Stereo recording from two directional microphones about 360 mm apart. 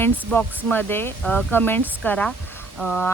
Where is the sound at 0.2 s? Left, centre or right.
Centre.